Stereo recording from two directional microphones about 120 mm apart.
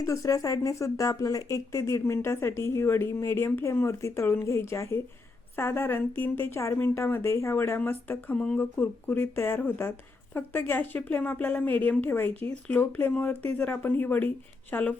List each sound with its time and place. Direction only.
0.0 s speech: 25° left (ahead or behind)